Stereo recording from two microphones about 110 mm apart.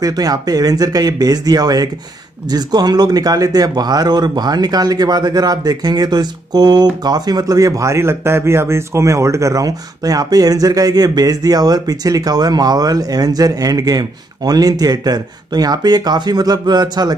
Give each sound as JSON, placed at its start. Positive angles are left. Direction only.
{"t": 0.0, "sound": "speech", "side_deg": -35}